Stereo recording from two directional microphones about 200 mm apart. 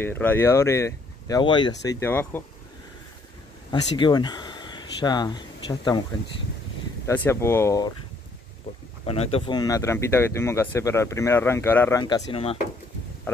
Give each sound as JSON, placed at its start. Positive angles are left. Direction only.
{"t": 0.0, "sound": "speech", "side_deg": 10}
{"t": 3.7, "sound": "speech", "side_deg": 20}
{"t": 7.2, "sound": "speech", "side_deg": 10}
{"t": 9.0, "sound": "speech", "side_deg": 30}
{"t": 12.0, "sound": "speech", "side_deg": 25}